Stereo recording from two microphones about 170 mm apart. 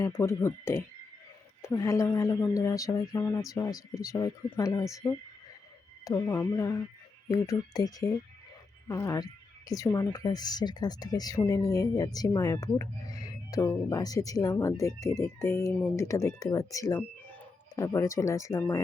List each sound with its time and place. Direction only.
0.0 s speech: 15° left (ahead or behind)